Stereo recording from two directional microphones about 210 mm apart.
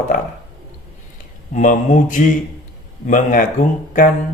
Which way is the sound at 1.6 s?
40° left (ahead or behind).